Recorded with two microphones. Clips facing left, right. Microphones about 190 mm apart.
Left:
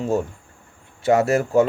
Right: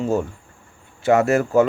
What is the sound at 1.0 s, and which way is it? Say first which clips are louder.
Speech: right 1 dB; 35° left (ahead or behind).